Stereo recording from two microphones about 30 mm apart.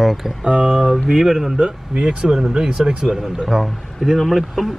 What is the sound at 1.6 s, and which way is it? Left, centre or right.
Speech, right.